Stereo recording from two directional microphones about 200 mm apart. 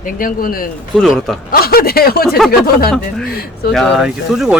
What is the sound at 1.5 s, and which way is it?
Speech, 50° left (ahead or behind).